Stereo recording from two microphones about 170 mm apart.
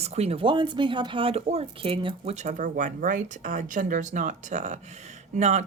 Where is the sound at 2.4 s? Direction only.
50° right (ahead or behind).